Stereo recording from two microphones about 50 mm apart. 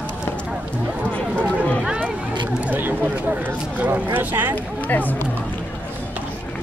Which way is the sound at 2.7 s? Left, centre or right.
Right.